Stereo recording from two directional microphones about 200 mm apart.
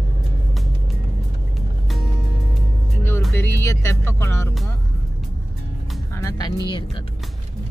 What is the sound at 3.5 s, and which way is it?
Music, 15° left (ahead or behind).